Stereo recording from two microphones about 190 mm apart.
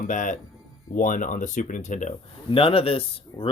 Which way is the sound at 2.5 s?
30° left (ahead or behind).